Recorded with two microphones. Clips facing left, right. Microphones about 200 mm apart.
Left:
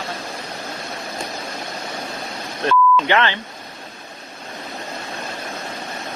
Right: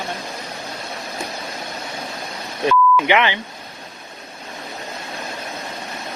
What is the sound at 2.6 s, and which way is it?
Beep, 10° right (ahead or behind).